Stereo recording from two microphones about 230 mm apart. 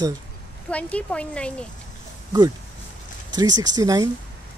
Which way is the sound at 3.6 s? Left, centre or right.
Centre.